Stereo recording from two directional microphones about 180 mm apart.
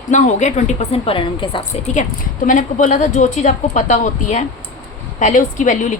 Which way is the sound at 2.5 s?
45° left (ahead or behind).